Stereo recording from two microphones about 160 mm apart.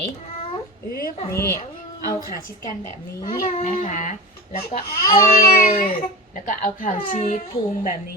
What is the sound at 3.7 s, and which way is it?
Speech, 55° left (ahead or behind).